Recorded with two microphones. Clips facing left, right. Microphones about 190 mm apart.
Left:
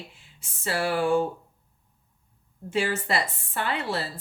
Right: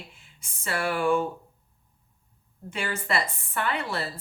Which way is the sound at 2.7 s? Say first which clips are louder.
Left 3 dB; 30° left (ahead or behind).